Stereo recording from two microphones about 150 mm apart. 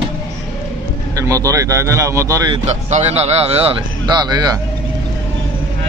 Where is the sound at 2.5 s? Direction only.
50° right (ahead or behind).